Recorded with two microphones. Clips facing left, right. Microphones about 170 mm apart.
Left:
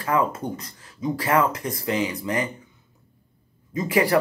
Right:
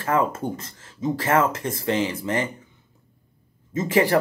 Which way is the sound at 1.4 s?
25° right (ahead or behind).